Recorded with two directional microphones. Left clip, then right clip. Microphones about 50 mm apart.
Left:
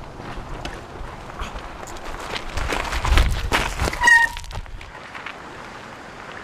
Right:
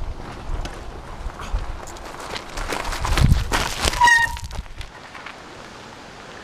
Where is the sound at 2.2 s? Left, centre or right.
Centre.